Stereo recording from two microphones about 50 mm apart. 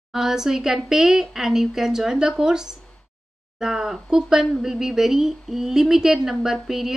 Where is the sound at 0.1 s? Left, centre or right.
Centre.